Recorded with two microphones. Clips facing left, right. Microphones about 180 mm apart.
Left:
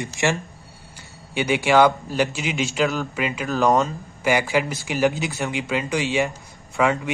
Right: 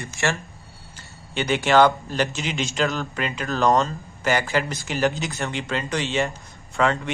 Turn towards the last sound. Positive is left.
turn(degrees=10)  # may be behind; listen again after turning